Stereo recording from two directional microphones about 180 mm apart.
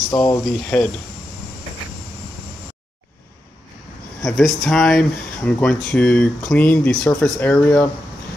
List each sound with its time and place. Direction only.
0.1 s speech: 20° left (ahead or behind)
0.5 s speech: 5° left (ahead or behind)
4.2 s speech: centre (ahead or behind)